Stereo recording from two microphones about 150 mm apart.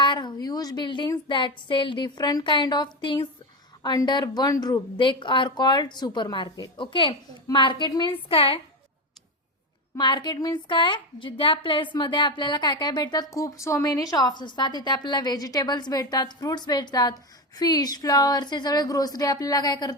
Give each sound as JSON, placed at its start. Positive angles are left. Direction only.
{"t": 0.0, "sound": "a woman's voice", "side_deg": 30}
{"t": 10.0, "sound": "a woman's voice", "side_deg": 30}